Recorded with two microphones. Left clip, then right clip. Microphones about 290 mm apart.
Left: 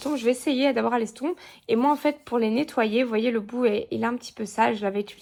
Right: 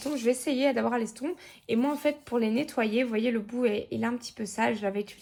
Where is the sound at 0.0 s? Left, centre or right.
Left.